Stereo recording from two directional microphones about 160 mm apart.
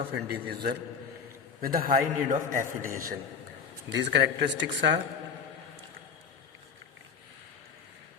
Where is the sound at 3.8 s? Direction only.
90° right.